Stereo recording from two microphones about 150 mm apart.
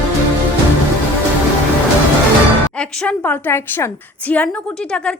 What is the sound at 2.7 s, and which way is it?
A woman's voice, 5° left (ahead or behind).